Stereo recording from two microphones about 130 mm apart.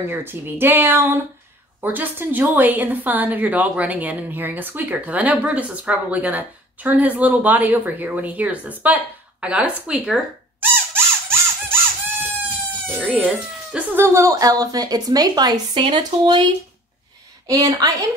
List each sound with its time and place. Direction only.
0.1 s a woman's voice: 15° right (ahead or behind)
11.0 s squeak: 20° right (ahead or behind)
12.8 s music: 15° right (ahead or behind)
13.2 s speech: 10° right (ahead or behind); by 16.4 s 40° right (ahead or behind)
17.5 s speech: 25° right (ahead or behind)